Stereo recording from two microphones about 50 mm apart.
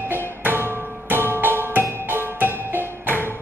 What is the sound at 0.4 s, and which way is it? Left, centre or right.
Music, right.